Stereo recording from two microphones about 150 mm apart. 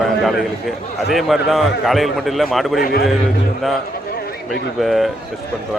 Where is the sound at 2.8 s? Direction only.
90° left.